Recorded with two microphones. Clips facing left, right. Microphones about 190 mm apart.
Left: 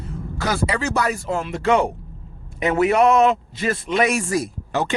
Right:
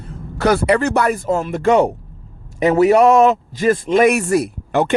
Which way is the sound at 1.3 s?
45° right (ahead or behind).